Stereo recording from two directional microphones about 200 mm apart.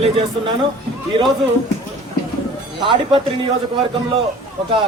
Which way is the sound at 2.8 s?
25° right (ahead or behind).